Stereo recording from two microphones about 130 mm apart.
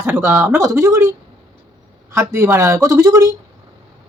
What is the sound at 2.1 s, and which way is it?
Speech, 20° right (ahead or behind).